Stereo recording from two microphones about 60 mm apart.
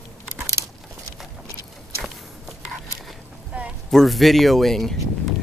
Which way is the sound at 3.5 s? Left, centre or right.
Right.